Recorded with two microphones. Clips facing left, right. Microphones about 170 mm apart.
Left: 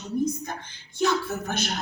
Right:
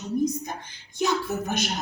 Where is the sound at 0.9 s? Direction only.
15° right (ahead or behind).